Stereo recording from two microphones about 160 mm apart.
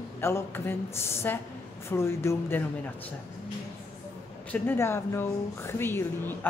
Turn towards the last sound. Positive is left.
turn(degrees=15)  # may be behind; listen again after turning